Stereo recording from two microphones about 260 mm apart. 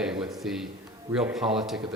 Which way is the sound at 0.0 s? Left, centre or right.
Centre.